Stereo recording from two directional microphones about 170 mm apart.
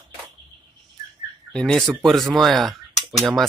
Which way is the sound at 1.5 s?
5° left (ahead or behind).